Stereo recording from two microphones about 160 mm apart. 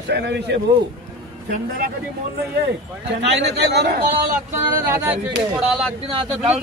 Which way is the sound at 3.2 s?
90° right.